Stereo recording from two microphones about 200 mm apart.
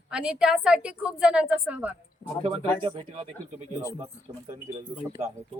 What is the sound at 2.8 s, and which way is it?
Speech, 25° right (ahead or behind).